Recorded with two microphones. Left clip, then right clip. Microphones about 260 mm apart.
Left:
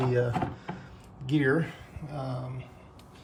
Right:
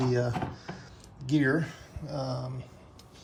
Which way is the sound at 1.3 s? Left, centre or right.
Right.